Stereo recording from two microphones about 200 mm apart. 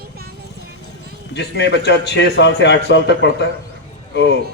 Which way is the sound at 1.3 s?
60° left (ahead or behind).